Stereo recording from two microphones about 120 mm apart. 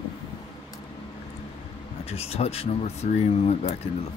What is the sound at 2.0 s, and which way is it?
Speech, 55° left (ahead or behind).